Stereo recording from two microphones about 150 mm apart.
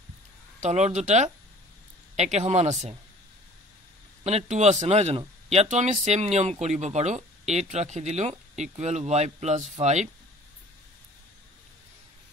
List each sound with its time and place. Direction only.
0.6 s speech: 50° right (ahead or behind)
4.2 s speech: 45° right (ahead or behind)